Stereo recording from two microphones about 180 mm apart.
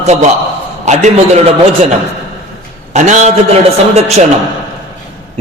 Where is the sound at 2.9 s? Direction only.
40° right (ahead or behind).